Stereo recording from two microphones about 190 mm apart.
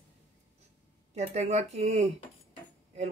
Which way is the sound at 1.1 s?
35° right (ahead or behind).